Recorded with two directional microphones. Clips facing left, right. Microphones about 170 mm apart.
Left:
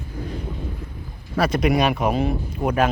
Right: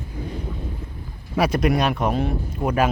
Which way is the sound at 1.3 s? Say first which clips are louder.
Even; 15° right (ahead or behind).